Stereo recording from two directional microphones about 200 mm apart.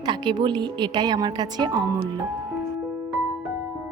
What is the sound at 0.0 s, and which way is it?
A woman's voice, 20° right (ahead or behind).